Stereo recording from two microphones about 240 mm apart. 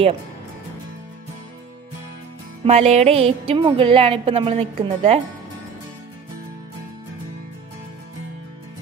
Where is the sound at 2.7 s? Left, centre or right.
Right.